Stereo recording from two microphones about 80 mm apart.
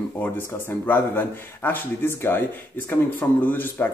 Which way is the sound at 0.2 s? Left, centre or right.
Left.